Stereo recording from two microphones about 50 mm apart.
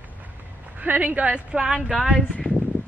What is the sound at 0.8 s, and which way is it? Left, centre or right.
A woman's voice, right.